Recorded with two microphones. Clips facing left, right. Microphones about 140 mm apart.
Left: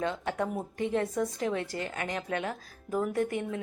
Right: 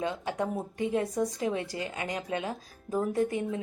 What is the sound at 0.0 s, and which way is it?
A woman's voice, 15° right (ahead or behind).